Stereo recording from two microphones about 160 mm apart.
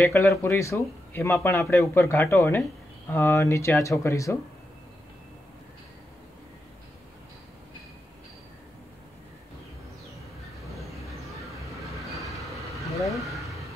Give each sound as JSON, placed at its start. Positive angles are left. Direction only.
{"t": 0.0, "sound": "speech", "side_deg": 20}
{"t": 13.1, "sound": "vehicle", "side_deg": 0}